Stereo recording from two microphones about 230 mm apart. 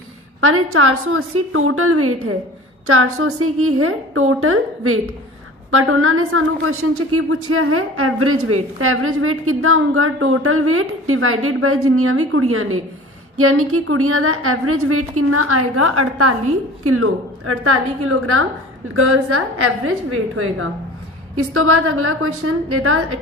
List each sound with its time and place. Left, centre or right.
0.4 s a woman's voice: right